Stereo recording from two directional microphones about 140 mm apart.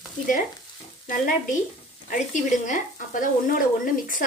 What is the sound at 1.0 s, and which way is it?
Speech, 75° left (ahead or behind).